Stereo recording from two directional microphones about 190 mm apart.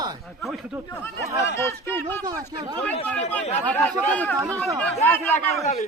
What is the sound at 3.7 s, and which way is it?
Speech, 5° left (ahead or behind).